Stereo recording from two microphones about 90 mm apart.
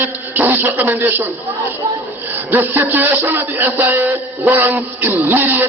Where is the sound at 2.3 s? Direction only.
20° right (ahead or behind).